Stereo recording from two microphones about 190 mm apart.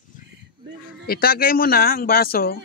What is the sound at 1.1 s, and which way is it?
Speech, 50° left (ahead or behind).